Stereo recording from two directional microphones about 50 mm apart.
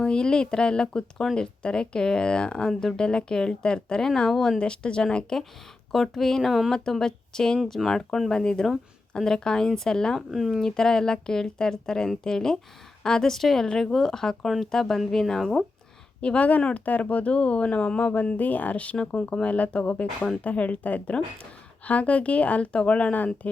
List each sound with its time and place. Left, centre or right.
0.0 s speech: centre
10.2 s speech: centre
10.6 s speech: centre
16.2 s speech: left